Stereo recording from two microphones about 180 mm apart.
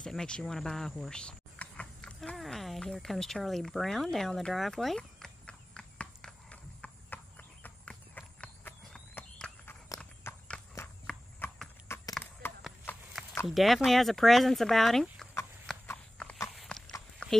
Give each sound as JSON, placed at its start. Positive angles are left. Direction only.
{"t": 0.0, "sound": "cricket", "side_deg": 5}
{"t": 11.1, "sound": "clip-clop", "side_deg": 5}
{"t": 12.1, "sound": "a sound", "side_deg": 10}
{"t": 12.9, "sound": "horse", "side_deg": 10}
{"t": 13.5, "sound": "speech", "side_deg": 0}
{"t": 15.9, "sound": "clip-clop", "side_deg": 10}
{"t": 17.2, "sound": "a sound", "side_deg": 5}